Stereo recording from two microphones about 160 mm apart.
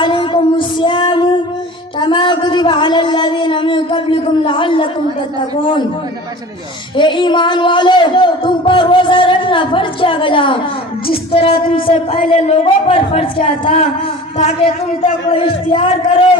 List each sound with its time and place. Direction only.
0.0 s music: 30° left (ahead or behind)
2.0 s a sound: 30° left (ahead or behind)
6.9 s a woman's voice: 30° left (ahead or behind)